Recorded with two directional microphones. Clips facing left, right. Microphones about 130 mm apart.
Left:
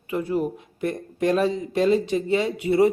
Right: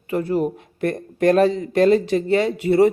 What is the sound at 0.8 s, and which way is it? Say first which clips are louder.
Speech: right 4 dB; 70° right (ahead or behind).